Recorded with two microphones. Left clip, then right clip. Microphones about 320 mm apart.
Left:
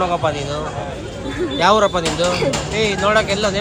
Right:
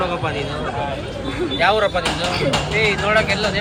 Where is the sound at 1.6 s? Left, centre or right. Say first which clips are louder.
Left 3 dB; centre.